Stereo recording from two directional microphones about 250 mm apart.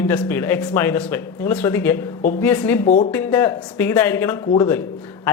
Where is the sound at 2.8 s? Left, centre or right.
Left.